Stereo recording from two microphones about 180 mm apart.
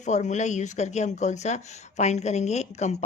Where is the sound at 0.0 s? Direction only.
40° left (ahead or behind).